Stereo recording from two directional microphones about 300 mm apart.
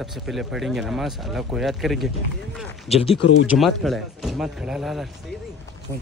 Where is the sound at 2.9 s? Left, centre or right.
Centre.